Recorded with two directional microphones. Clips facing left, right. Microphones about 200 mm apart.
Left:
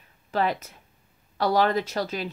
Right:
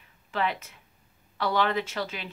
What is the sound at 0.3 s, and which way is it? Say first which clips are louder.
Speech: left 4 dB; 40° left (ahead or behind).